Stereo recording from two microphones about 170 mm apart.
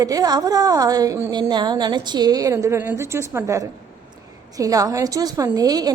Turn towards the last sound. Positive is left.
turn(degrees=-20)  # may be behind; listen again after turning